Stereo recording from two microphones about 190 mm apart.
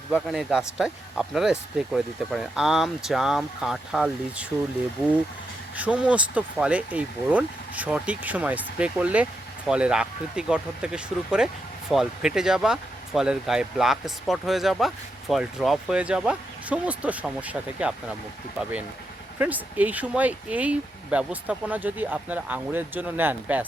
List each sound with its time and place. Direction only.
0.1 s speech: centre (ahead or behind)
5.7 s speech: 5° right (ahead or behind)
19.4 s speech: 10° right (ahead or behind)